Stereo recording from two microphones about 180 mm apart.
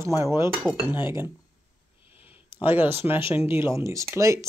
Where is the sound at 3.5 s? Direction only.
15° right (ahead or behind).